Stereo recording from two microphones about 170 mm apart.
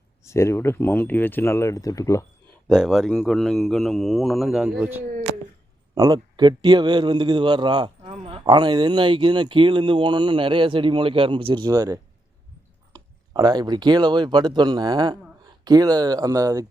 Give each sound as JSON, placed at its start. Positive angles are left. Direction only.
{"t": 0.3, "sound": "speech", "side_deg": 15}
{"t": 2.6, "sound": "speech", "side_deg": -5}
{"t": 5.9, "sound": "a man's voice", "side_deg": -25}